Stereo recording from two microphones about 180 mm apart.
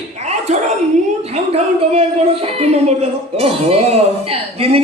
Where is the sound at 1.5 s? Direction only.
35° right (ahead or behind).